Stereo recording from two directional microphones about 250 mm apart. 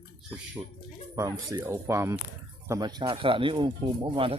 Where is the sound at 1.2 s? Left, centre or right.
Centre.